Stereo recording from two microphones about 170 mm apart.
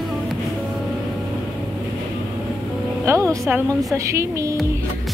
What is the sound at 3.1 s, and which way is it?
Music, 20° right (ahead or behind).